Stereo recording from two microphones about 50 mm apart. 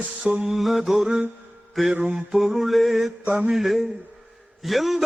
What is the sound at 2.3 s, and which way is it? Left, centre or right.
Yodeling, centre.